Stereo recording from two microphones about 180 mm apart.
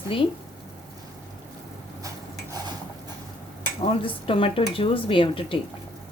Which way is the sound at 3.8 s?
30° left (ahead or behind).